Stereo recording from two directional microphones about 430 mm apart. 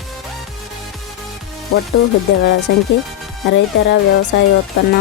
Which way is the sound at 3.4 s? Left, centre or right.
Left.